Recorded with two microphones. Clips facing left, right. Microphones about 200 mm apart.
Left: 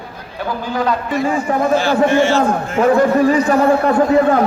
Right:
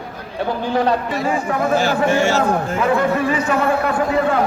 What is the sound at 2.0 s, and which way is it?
Speech, 40° right (ahead or behind).